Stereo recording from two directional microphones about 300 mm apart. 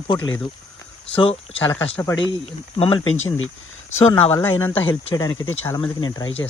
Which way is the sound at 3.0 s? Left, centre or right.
Left.